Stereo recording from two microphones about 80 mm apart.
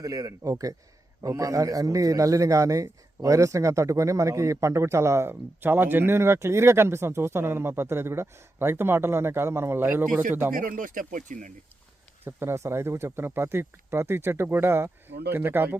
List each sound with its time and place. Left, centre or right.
0.0 s a man's voice: right
12.2 s a man's voice: right